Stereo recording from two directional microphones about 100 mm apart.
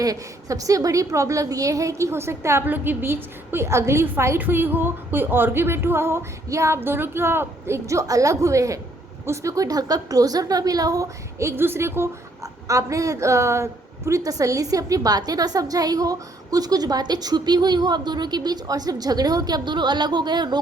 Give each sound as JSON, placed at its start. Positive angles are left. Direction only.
{"t": 0.0, "sound": "a woman's voice", "side_deg": -35}